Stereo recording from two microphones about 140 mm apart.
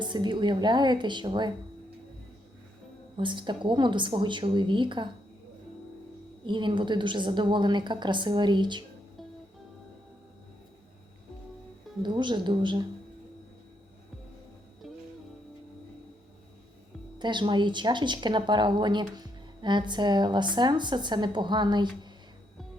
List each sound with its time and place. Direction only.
0.0 s speech: 35° right (ahead or behind)
3.2 s speech: 35° right (ahead or behind)
6.4 s speech: 35° right (ahead or behind)
12.0 s speech: 35° right (ahead or behind)
14.8 s music: centre (ahead or behind)
17.2 s speech: 35° right (ahead or behind)